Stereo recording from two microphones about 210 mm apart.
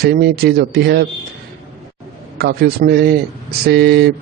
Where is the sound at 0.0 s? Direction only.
50° right (ahead or behind).